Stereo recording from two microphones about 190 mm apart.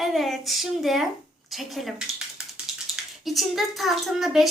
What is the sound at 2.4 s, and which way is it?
Typing, 5° right (ahead or behind).